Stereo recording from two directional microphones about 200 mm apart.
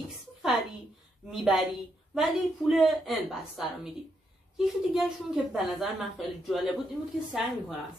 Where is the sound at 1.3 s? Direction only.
Centre (ahead or behind).